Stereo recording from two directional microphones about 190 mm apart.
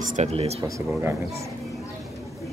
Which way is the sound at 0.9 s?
15° right (ahead or behind).